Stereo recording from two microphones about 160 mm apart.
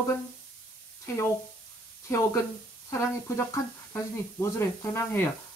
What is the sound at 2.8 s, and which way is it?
Speech, 15° left (ahead or behind).